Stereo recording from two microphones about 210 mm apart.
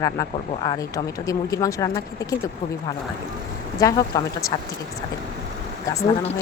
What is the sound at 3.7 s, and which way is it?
Speech, 20° left (ahead or behind).